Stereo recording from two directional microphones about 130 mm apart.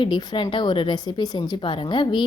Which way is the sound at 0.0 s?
40° left (ahead or behind).